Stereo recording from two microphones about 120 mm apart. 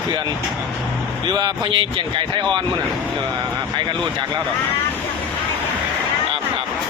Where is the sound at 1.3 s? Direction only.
35° right (ahead or behind).